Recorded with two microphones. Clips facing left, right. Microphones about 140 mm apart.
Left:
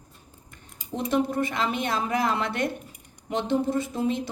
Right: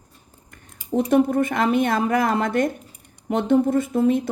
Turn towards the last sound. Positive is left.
turn(degrees=-55)  # may be behind; listen again after turning